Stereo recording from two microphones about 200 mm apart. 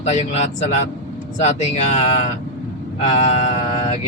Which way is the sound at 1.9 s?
35° left (ahead or behind).